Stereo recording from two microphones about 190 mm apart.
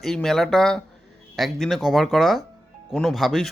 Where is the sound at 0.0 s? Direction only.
Centre (ahead or behind).